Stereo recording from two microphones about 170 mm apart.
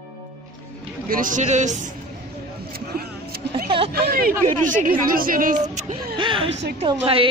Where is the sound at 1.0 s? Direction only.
55° right (ahead or behind).